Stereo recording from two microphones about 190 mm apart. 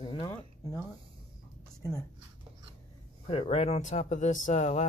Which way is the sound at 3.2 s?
30° left (ahead or behind).